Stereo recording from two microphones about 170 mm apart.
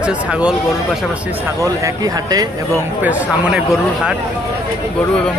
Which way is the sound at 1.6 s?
20° right (ahead or behind).